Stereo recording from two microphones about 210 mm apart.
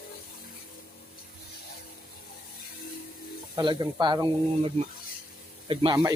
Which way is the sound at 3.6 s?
20° right (ahead or behind).